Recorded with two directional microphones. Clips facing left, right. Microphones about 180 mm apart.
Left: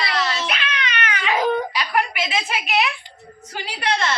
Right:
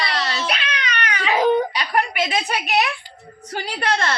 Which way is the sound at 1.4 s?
35° right (ahead or behind).